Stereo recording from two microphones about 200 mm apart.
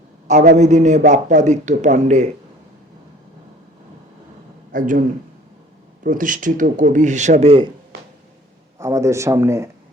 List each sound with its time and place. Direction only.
0.3 s a man's voice: 35° right (ahead or behind)
4.7 s a man's voice: 40° right (ahead or behind)
8.8 s a man's voice: 15° right (ahead or behind)